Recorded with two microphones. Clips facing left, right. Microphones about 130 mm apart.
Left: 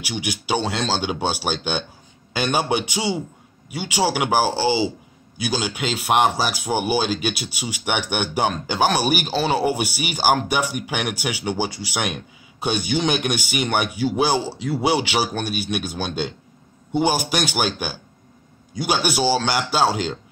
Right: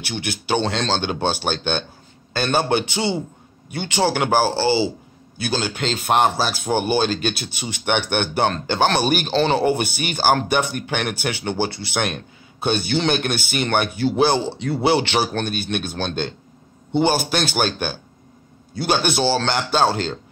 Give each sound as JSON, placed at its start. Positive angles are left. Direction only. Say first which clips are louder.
{"t": 0.0, "sound": "speech", "louder": "even", "side_deg": 10}